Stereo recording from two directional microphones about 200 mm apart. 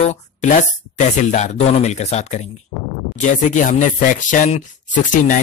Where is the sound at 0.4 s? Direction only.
35° left (ahead or behind).